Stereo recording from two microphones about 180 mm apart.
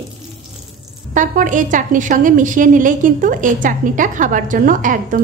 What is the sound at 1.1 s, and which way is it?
A woman's voice, 45° right (ahead or behind).